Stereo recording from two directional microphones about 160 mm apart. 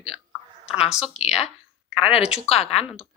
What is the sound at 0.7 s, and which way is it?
Speech, 5° right (ahead or behind).